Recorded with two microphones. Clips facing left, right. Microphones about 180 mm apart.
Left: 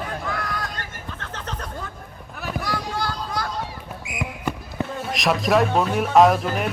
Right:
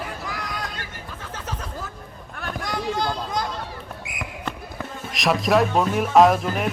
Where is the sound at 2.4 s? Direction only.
5° left (ahead or behind).